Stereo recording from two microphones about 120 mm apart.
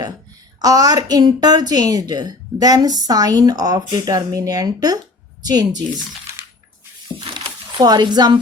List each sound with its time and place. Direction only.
0.6 s a woman's voice: 30° right (ahead or behind)
7.8 s a woman's voice: 35° right (ahead or behind)